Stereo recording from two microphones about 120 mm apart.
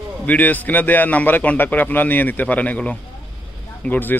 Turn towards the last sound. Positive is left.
turn(degrees=15)  # may be behind; listen again after turning